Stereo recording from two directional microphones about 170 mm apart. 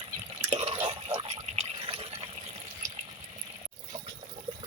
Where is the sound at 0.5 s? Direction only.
35° right (ahead or behind).